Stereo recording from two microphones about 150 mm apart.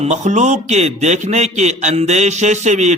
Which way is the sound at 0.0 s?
50° right (ahead or behind).